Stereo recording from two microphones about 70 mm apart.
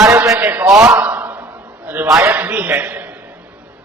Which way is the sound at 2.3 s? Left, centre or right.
Right.